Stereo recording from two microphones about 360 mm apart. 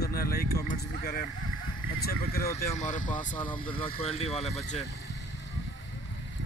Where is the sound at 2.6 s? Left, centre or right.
Left.